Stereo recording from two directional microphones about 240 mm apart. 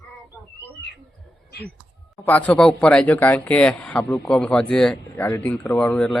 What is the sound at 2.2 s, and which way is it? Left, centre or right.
Speech, centre.